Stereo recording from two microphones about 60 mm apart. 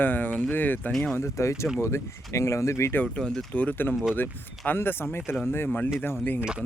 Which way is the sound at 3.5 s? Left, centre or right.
Left.